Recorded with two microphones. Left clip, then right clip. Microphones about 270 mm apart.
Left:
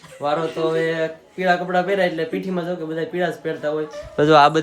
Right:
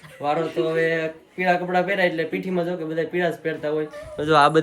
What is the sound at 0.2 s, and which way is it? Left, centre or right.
Speech, centre.